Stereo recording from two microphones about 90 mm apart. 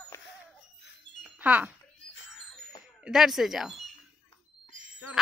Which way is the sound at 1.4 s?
20° right (ahead or behind).